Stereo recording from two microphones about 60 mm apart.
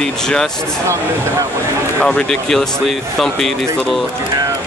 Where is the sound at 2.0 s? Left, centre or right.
Centre.